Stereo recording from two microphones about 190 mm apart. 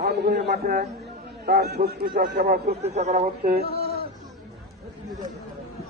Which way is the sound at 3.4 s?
55° right (ahead or behind).